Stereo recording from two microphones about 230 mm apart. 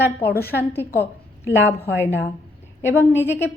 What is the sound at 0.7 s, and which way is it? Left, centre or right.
A woman's voice, centre.